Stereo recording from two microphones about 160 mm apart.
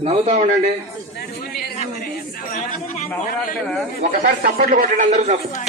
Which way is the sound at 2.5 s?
60° left (ahead or behind).